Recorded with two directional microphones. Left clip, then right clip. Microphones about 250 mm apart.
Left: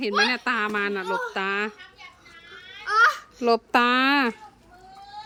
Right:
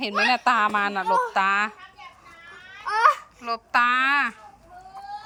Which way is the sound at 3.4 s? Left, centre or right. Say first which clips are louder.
Left 2 dB; left.